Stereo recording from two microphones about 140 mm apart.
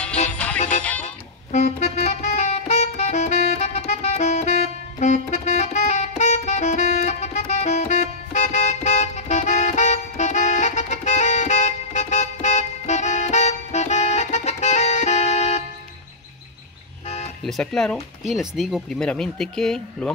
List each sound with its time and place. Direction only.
0.3 s music: 10° left (ahead or behind)
0.6 s music: 60° left (ahead or behind)
17.5 s speech: 5° left (ahead or behind)